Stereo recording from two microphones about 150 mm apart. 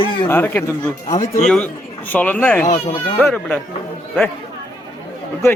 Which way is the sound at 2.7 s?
40° left (ahead or behind).